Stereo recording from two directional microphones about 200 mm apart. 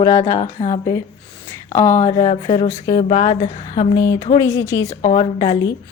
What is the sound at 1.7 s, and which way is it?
Speech, 20° left (ahead or behind).